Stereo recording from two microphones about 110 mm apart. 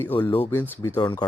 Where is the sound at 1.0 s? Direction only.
45° left (ahead or behind).